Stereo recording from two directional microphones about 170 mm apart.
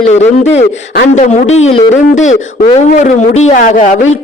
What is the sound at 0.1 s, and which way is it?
Speech, 40° left (ahead or behind).